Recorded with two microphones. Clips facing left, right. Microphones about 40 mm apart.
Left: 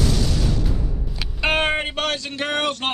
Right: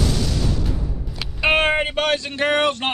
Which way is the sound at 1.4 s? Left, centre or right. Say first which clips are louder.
Right 3 dB; centre.